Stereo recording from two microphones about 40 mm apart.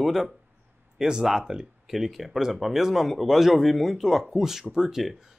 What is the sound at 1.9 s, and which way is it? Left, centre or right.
Speech, centre.